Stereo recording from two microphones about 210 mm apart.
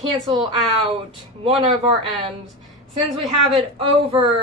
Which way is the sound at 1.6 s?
25° right (ahead or behind).